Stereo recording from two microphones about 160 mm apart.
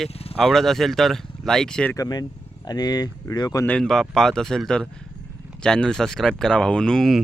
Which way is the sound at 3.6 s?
5° left (ahead or behind).